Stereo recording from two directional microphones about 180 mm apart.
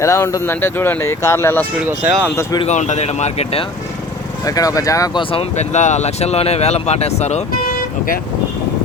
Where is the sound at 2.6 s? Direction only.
40° left (ahead or behind).